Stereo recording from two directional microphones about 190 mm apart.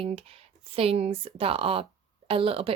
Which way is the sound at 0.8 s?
30° right (ahead or behind).